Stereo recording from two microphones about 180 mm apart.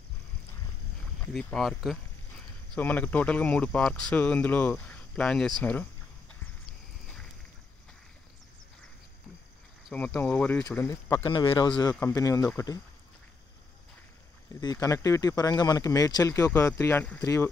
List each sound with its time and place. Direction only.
1.3 s speech: centre (ahead or behind)
9.8 s speech: 5° left (ahead or behind)
11.2 s speech: 25° left (ahead or behind)
14.6 s speech: 20° left (ahead or behind)